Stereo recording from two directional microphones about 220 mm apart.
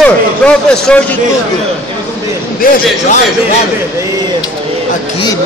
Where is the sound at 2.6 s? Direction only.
35° left (ahead or behind).